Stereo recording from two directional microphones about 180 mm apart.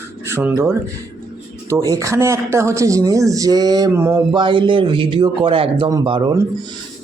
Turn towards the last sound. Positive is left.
turn(degrees=-25)  # may be behind; listen again after turning